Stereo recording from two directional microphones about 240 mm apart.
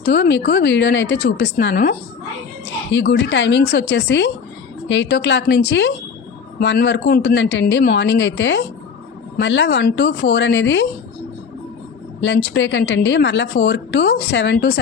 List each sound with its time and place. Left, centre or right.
0.0 s a woman's voice: left
12.2 s a woman's voice: left